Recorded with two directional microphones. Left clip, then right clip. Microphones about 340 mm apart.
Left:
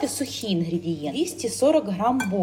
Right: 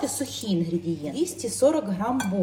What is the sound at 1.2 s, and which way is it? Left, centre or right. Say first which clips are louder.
Speech: left 1 dB; centre.